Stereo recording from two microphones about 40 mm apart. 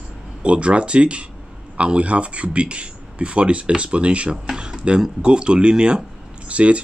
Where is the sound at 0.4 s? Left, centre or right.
Right.